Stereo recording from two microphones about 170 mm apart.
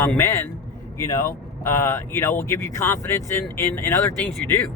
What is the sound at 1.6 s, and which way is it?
Speech, 15° left (ahead or behind).